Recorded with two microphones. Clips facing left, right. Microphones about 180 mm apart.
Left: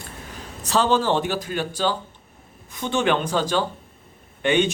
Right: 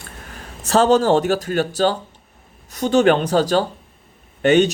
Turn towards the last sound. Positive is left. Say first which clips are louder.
# right 6 dB
turn(degrees=-40)  # may be behind; listen again after turning